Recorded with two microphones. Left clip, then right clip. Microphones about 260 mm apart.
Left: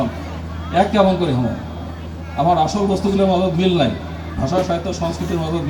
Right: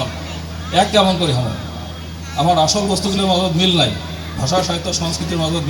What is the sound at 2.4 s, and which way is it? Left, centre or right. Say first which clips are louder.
A man's voice: right 1 dB; left.